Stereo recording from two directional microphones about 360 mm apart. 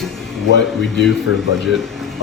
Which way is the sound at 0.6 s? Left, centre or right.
Centre.